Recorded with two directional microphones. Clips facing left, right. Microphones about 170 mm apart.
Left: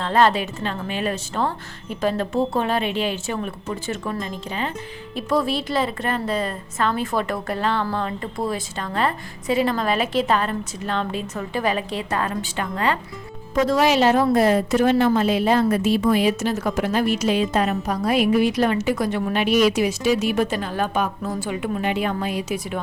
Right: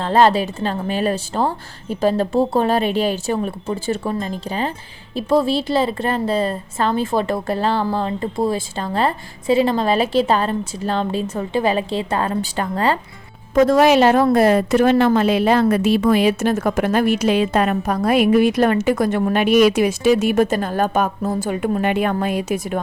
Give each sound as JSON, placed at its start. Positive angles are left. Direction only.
{"t": 0.0, "sound": "a woman's voice", "side_deg": -35}
{"t": 13.5, "sound": "a woman's voice", "side_deg": -50}